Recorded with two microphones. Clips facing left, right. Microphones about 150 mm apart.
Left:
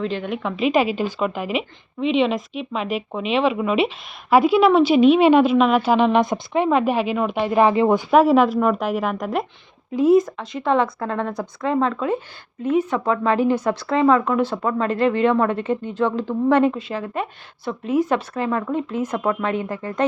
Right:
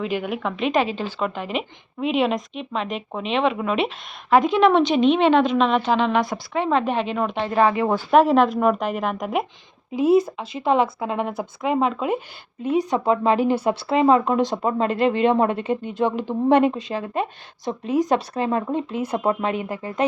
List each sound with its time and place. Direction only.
0.0 s a woman's voice: 10° right (ahead or behind); by 1.6 s 10° left (ahead or behind)
2.0 s a woman's voice: 5° right (ahead or behind)
10.0 s a woman's voice: 30° right (ahead or behind)
10.3 s a woman's voice: 10° right (ahead or behind)
19.1 s speech: 30° right (ahead or behind)
19.5 s a woman's voice: 15° right (ahead or behind)